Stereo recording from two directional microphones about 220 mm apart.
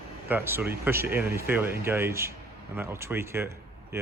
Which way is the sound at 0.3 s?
10° right (ahead or behind).